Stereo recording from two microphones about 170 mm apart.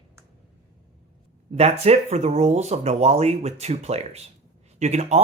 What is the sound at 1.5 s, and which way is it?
Speech, 35° right (ahead or behind).